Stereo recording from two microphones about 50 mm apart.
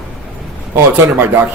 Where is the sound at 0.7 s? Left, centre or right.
Right.